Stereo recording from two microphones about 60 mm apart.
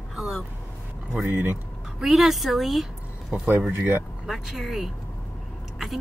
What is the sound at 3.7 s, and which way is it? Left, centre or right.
Speech, right.